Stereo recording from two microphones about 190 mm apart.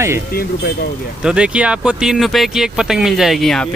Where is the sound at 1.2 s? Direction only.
5° right (ahead or behind).